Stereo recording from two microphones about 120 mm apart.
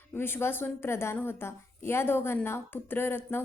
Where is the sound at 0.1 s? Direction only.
20° left (ahead or behind).